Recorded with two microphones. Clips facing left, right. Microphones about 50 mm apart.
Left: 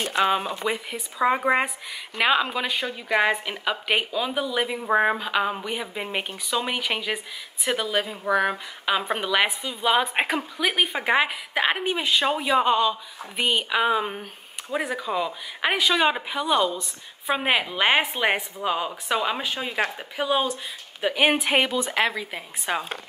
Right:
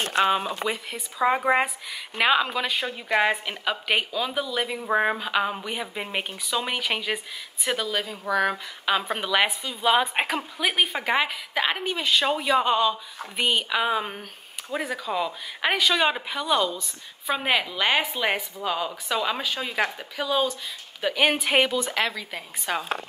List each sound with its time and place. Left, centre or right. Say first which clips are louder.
0.3 s a woman's voice: even; centre
7.6 s speech: left 2 dB; centre
12.1 s speech: right 1 dB; centre
21.7 s speech: left 2 dB; centre